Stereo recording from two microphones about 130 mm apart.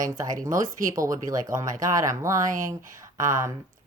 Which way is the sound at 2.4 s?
90° right.